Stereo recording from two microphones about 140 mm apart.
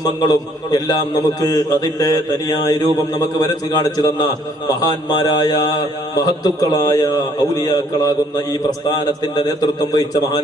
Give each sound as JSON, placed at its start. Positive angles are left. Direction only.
{"t": 0.0, "sound": "a man's voice", "side_deg": 25}
{"t": 9.3, "sound": "a man's voice", "side_deg": 30}